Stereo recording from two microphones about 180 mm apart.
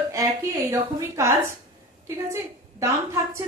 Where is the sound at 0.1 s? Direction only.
20° right (ahead or behind).